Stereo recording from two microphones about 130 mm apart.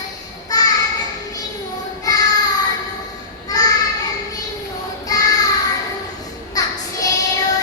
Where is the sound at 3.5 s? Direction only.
30° left (ahead or behind).